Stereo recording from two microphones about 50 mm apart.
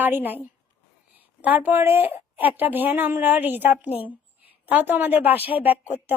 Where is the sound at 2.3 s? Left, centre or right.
Right.